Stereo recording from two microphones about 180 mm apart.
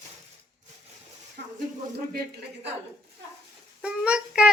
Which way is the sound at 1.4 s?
60° right (ahead or behind).